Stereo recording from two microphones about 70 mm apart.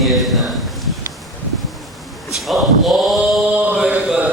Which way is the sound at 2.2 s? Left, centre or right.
Centre.